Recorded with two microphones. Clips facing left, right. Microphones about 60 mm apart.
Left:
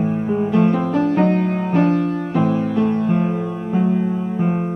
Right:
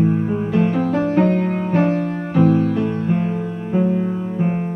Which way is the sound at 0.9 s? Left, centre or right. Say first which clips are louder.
Even; right.